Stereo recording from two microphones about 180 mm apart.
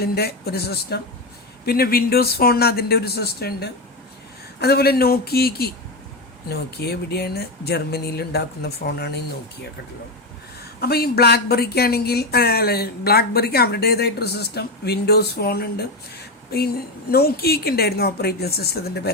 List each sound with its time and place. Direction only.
0.0 s speech: 60° left (ahead or behind)
10.8 s speech: 60° left (ahead or behind)